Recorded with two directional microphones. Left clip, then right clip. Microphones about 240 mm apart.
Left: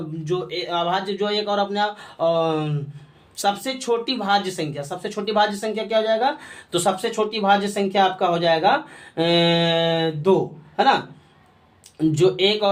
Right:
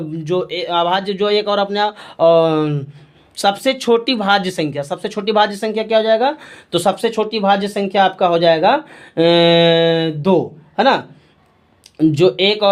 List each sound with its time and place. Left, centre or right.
0.3 s speech: right